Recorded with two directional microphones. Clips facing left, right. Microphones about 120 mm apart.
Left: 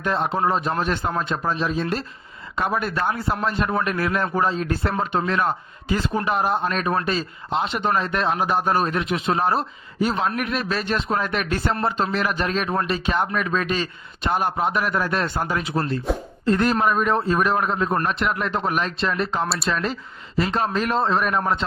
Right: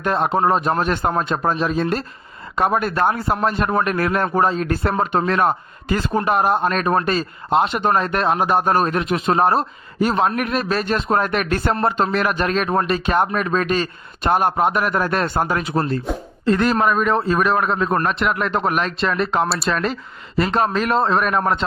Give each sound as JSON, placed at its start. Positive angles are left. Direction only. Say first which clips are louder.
{"t": 0.0, "sound": "a man's voice", "louder": "right 4 dB", "side_deg": -55}
{"t": 16.1, "sound": "speech", "louder": "left 1 dB", "side_deg": 0}
{"t": 16.5, "sound": "a man's voice", "louder": "right 2 dB", "side_deg": -90}